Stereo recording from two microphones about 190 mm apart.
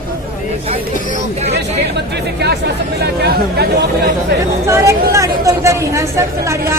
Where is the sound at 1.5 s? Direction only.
60° right (ahead or behind).